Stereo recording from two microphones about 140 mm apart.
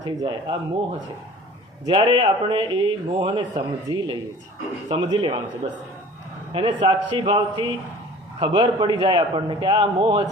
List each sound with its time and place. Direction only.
0.0 s speech: 30° right (ahead or behind)
1.9 s speech: 35° right (ahead or behind)
6.5 s speech: 40° right (ahead or behind)